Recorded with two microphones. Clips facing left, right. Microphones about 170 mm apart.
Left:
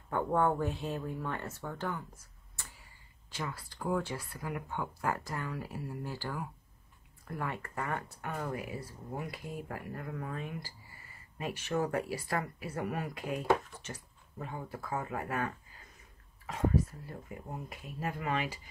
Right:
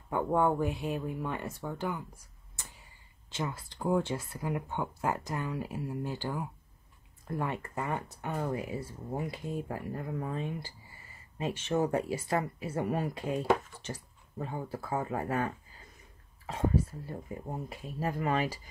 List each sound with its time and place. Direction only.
0.1 s speech: 15° right (ahead or behind); by 18.6 s 35° right (ahead or behind)